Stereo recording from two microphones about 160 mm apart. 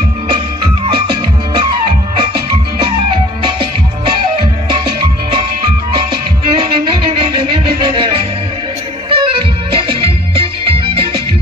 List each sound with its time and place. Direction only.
0.3 s music: 35° right (ahead or behind)
6.5 s music: 30° right (ahead or behind)